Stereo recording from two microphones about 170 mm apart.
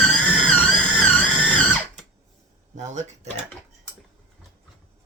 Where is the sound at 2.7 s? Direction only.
45° right (ahead or behind).